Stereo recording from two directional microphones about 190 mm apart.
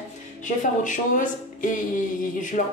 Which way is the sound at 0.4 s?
40° left (ahead or behind).